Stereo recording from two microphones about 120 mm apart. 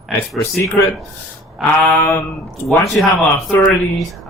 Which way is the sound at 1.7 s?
10° left (ahead or behind).